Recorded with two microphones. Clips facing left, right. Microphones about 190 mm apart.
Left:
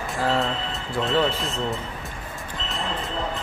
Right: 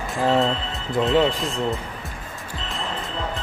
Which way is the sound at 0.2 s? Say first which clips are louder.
Right 4 dB; 20° right (ahead or behind).